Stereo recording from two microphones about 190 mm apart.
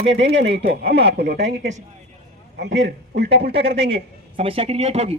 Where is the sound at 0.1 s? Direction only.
65° right (ahead or behind).